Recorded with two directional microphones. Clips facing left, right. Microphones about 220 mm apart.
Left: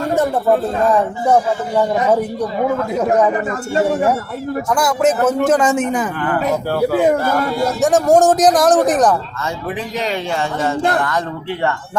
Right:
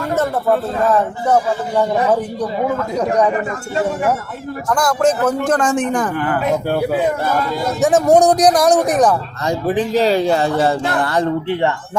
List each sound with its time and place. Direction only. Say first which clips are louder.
0.9 s speech: left 1 dB; 10° left (ahead or behind)
3.0 s speech: left 1 dB; 5° left (ahead or behind)
4.7 s speech: right 1 dB; 5° left (ahead or behind)
7.8 s speech: right 1 dB; centre (ahead or behind)
9.4 s a man's voice: right 6 dB; 35° right (ahead or behind)